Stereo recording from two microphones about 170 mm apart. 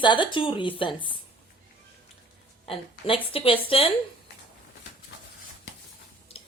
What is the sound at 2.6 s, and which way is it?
A woman's voice, 30° left (ahead or behind).